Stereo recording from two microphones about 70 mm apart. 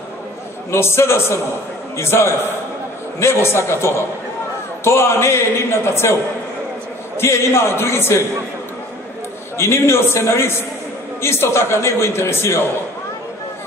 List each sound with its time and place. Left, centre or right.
0.7 s a man's voice: left
7.2 s a man's voice: left
9.6 s a man's voice: left